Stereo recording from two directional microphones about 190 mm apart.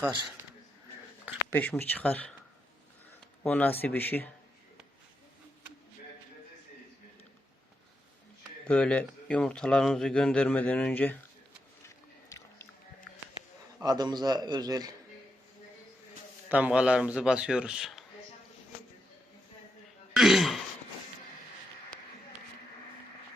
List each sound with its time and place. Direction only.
0.0 s speech: 10° right (ahead or behind)
1.5 s speech: 10° left (ahead or behind)
3.4 s speech: 10° left (ahead or behind)
8.6 s speech: 5° left (ahead or behind)
13.8 s a man's voice: 20° right (ahead or behind)
16.5 s speech: 10° right (ahead or behind)
20.1 s throat clearing: centre (ahead or behind)
21.9 s a sound: 5° left (ahead or behind)